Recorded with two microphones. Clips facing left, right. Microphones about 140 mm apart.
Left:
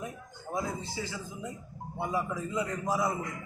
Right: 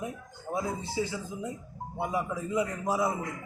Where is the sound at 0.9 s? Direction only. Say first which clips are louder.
Right 5 dB; 20° right (ahead or behind).